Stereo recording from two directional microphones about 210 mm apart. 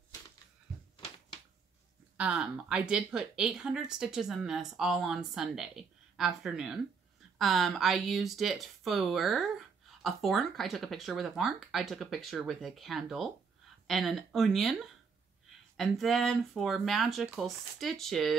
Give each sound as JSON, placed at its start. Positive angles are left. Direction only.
{"t": 2.1, "sound": "speech", "side_deg": -5}